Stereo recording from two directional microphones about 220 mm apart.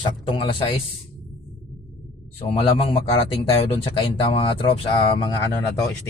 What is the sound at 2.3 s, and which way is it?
A man's voice, 25° left (ahead or behind).